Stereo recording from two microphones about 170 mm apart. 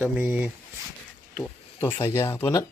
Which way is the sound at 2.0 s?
15° left (ahead or behind).